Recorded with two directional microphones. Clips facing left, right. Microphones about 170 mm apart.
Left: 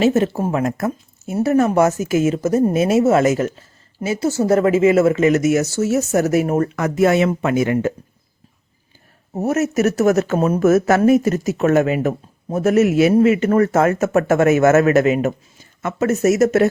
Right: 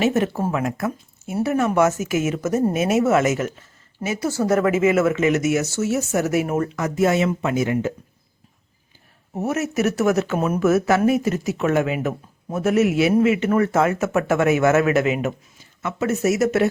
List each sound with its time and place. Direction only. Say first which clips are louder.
0.0 s speech: left 4 dB; 25° left (ahead or behind)
0.5 s speech: left 4 dB; 40° left (ahead or behind)
6.7 s speech: left 3 dB; 65° left (ahead or behind)
9.4 s speech: left 4 dB; 40° left (ahead or behind)